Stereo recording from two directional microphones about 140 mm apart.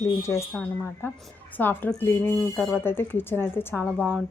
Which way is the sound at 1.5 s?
10° left (ahead or behind).